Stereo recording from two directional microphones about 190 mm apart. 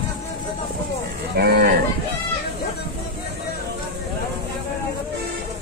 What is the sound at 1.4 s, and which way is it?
Livestock, 55° right (ahead or behind).